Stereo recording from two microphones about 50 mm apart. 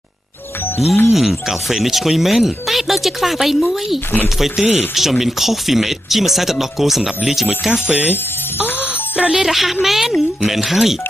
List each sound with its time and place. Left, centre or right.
1.1 s speech: centre
8.7 s music: right
9.3 s speech: centre